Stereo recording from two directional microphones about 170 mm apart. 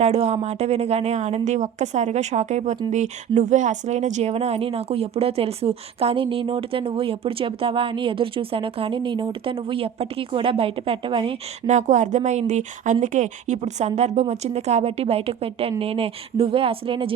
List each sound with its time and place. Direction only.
0.0 s speech: 40° right (ahead or behind)
11.7 s speech: 45° right (ahead or behind)